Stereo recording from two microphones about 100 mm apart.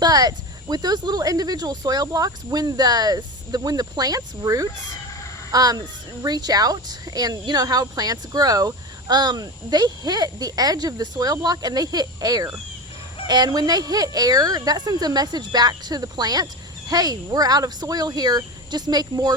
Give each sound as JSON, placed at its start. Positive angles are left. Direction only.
{"t": 0.0, "sound": "speech", "side_deg": -40}